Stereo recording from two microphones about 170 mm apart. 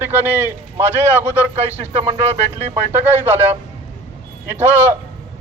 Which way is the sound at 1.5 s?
40° right (ahead or behind).